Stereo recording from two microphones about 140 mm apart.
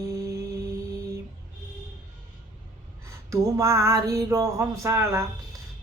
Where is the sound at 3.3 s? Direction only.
20° right (ahead or behind).